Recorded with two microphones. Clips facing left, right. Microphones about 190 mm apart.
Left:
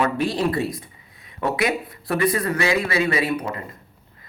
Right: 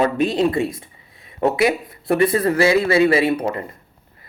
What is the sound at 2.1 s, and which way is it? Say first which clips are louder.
Speech: right 5 dB; 30° right (ahead or behind).